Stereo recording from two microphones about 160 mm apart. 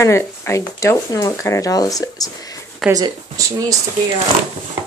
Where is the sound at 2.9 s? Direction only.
20° right (ahead or behind).